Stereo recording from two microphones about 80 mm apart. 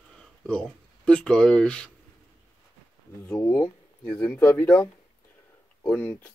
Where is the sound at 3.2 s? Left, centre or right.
Left.